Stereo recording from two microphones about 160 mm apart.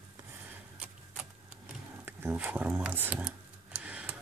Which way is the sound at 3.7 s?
10° right (ahead or behind).